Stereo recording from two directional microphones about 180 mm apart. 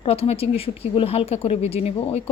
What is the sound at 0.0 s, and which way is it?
Speech, 35° left (ahead or behind).